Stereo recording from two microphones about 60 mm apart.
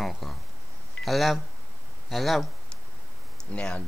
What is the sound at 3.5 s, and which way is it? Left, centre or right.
Speech, centre.